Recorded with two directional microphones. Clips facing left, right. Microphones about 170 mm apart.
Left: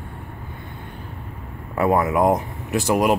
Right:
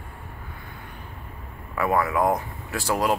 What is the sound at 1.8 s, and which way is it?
Speech, 20° left (ahead or behind).